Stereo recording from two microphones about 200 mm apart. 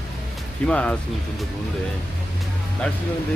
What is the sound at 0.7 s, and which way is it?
Speech, 5° left (ahead or behind).